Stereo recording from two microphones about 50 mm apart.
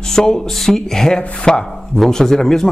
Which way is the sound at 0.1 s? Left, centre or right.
Centre.